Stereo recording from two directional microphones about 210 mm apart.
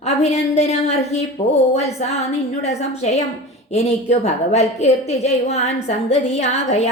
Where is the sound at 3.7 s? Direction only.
30° left (ahead or behind).